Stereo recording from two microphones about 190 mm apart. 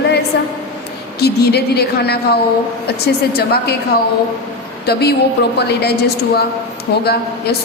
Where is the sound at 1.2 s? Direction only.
60° left (ahead or behind).